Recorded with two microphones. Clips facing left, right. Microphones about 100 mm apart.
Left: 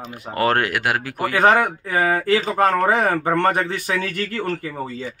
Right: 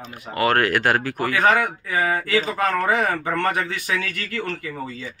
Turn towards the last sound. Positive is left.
turn(degrees=35)  # may be behind; listen again after turning